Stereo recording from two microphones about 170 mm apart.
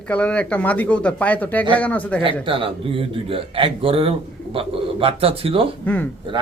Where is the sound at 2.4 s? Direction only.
30° right (ahead or behind).